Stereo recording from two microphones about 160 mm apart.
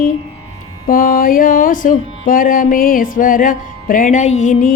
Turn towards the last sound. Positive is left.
turn(degrees=50)  # may be behind; listen again after turning